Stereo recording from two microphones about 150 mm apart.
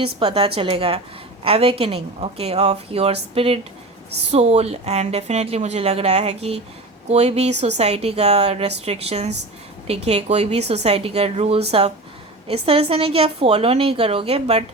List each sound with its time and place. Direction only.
0.0 s a woman's voice: 35° right (ahead or behind)